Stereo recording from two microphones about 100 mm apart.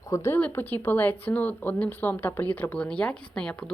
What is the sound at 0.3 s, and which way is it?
A woman's voice, 20° left (ahead or behind).